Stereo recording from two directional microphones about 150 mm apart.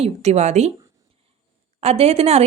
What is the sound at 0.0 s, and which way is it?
Speech, 45° right (ahead or behind).